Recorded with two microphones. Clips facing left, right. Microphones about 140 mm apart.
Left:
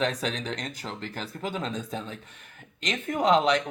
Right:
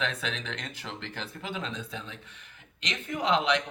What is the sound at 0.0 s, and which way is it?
Speech, 40° left (ahead or behind).